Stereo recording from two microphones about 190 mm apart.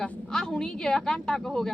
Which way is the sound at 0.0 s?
5° left (ahead or behind).